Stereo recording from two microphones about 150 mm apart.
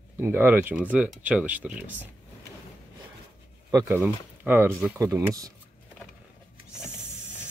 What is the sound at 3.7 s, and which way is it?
Speech, 20° right (ahead or behind).